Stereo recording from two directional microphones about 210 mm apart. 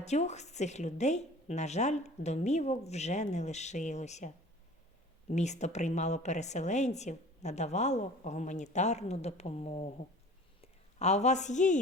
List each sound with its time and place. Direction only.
0.0 s a woman's voice: 30° left (ahead or behind)
5.3 s a woman's voice: 35° left (ahead or behind)